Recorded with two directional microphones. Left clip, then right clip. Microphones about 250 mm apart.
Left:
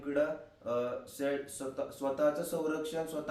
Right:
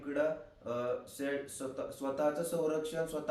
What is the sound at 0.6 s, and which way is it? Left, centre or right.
Speech, centre.